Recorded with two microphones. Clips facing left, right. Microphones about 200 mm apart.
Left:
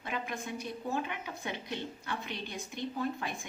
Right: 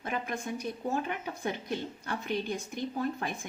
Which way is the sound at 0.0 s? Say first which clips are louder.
Right 3 dB; 45° right (ahead or behind).